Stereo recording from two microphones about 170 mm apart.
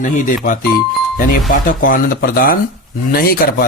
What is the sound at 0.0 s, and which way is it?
Speech, 50° left (ahead or behind).